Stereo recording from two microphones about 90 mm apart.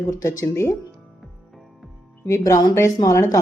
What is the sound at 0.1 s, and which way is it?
Speech, 35° left (ahead or behind).